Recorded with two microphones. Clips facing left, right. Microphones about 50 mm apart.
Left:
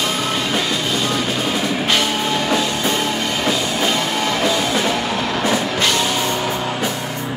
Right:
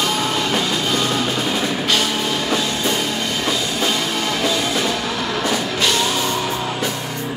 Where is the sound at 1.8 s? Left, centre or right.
Left.